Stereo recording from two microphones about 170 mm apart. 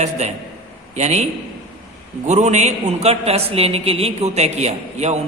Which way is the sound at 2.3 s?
45° right (ahead or behind).